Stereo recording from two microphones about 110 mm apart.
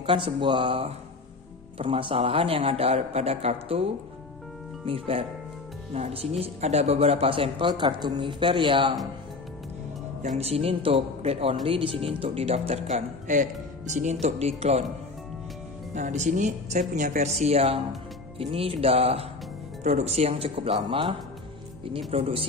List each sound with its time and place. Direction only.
0.0 s speech: 50° right (ahead or behind)
10.2 s speech: 75° right (ahead or behind)
14.2 s speech: 75° right (ahead or behind)
15.9 s speech: 90° right; by 17.7 s 75° right (ahead or behind)
18.4 s speech: 60° right (ahead or behind)
19.8 s speech: 90° right; by 22.5 s 60° right (ahead or behind)